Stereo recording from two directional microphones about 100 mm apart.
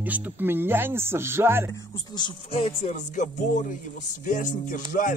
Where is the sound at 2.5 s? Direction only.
80° left.